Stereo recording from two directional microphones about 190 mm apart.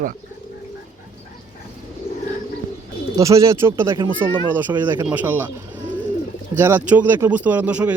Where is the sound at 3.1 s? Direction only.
15° right (ahead or behind).